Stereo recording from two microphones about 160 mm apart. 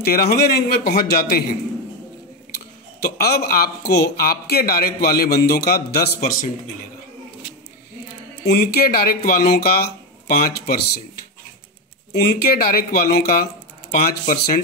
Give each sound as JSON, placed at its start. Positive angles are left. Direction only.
{"t": 0.0, "sound": "speech", "side_deg": 70}
{"t": 3.0, "sound": "speech", "side_deg": 75}
{"t": 8.5, "sound": "speech", "side_deg": 70}
{"t": 12.2, "sound": "speech", "side_deg": 70}